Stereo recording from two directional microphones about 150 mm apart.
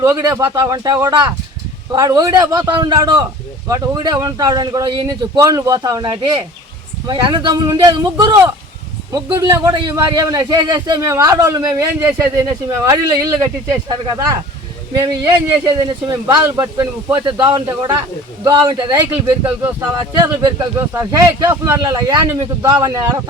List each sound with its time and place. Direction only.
0.0 s a man's voice: 20° right (ahead or behind)